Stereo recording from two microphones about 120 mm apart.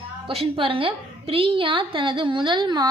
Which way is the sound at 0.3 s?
50° right (ahead or behind).